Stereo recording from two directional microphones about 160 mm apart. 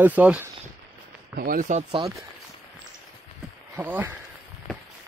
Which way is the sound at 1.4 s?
60° right (ahead or behind).